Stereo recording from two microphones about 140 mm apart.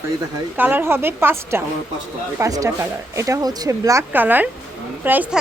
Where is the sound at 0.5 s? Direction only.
15° right (ahead or behind).